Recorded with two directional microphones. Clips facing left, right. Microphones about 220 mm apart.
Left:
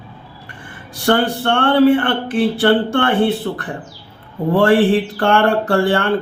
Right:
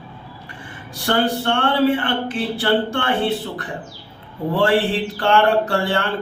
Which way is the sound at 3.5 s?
55° left (ahead or behind).